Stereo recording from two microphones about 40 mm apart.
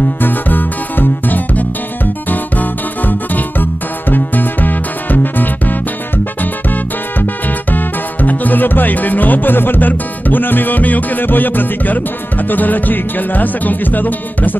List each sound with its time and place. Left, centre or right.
0.2 s music: left
7.7 s music: left